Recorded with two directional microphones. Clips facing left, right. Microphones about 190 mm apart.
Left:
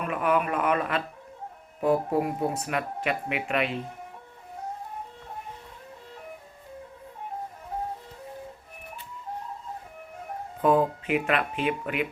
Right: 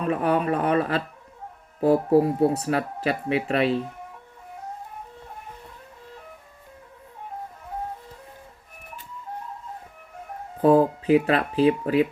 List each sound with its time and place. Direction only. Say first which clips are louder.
0.0 s speech: right 3 dB; 35° right (ahead or behind)
10.6 s speech: right 5 dB; 35° right (ahead or behind)